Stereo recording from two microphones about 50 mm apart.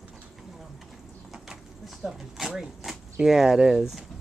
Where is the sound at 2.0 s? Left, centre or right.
Right.